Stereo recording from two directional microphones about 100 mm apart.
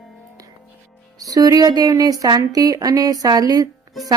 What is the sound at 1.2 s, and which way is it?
Speech, 35° right (ahead or behind).